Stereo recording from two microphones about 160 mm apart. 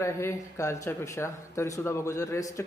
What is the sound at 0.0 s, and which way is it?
A man's voice, 15° left (ahead or behind).